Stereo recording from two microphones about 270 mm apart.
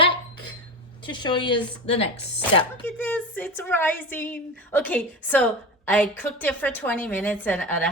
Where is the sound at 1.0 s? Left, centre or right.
Centre.